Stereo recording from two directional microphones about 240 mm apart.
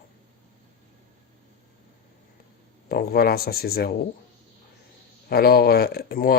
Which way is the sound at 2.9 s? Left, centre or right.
Left.